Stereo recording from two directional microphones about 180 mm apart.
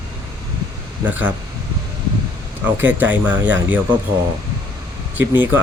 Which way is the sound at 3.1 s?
10° right (ahead or behind).